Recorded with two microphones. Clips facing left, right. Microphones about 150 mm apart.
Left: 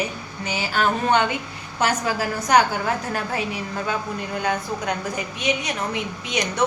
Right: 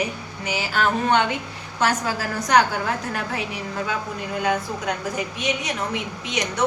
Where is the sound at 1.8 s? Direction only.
20° left (ahead or behind).